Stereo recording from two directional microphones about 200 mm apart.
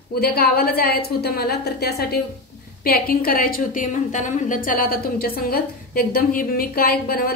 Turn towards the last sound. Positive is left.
turn(degrees=50)  # may be behind; listen again after turning